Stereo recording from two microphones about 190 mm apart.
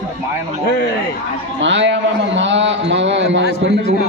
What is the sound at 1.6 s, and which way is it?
A man's voice, 70° right (ahead or behind).